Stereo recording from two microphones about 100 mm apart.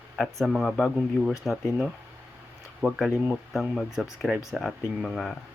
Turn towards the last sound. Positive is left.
turn(degrees=0)  # may be behind; listen again after turning